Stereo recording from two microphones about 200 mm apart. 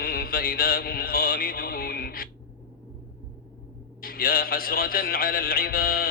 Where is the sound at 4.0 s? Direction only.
45° left (ahead or behind).